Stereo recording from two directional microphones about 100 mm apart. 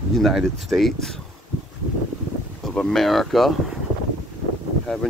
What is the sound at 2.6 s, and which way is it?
Speech, 5° left (ahead or behind).